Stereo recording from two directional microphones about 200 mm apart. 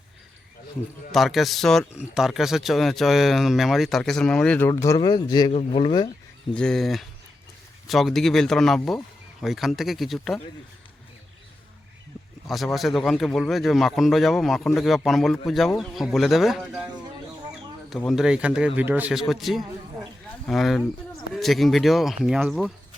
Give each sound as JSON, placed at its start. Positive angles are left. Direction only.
{"t": 1.1, "sound": "speech", "side_deg": 0}
{"t": 6.5, "sound": "speech", "side_deg": 5}
{"t": 12.5, "sound": "speech", "side_deg": 0}
{"t": 17.9, "sound": "speech", "side_deg": 0}